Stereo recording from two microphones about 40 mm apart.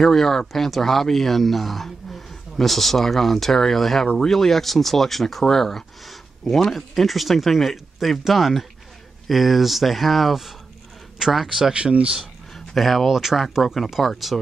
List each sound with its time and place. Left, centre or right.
0.0 s speech: centre
11.7 s speech: right
12.5 s speech: centre